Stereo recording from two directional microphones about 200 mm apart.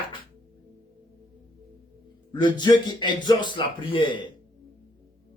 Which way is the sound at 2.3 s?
25° left (ahead or behind).